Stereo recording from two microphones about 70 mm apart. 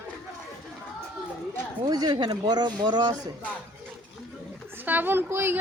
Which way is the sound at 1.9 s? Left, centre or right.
Right.